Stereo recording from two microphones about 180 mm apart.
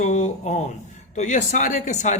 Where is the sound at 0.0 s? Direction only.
40° left (ahead or behind).